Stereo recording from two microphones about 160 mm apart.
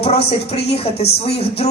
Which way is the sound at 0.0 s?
40° left (ahead or behind).